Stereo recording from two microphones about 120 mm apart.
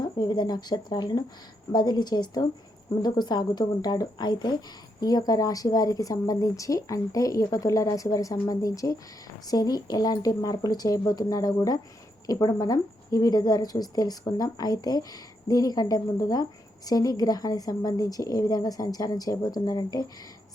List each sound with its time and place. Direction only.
0.0 s speech: 35° left (ahead or behind)